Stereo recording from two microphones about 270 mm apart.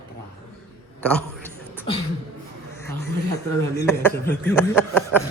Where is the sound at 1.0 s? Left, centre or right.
Centre.